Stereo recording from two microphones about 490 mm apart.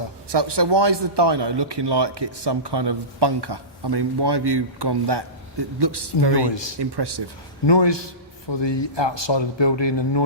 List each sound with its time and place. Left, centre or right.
0.3 s speech: right
6.5 s a man's voice: left
6.7 s speech: right
7.7 s a man's voice: left